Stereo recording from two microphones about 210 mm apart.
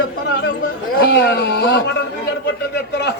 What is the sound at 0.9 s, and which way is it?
Speech, 50° left (ahead or behind).